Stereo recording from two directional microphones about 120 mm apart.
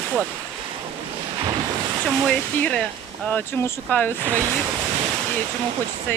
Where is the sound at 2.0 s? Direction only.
10° left (ahead or behind).